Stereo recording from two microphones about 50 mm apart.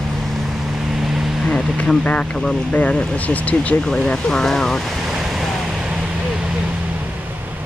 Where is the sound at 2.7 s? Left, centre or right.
Left.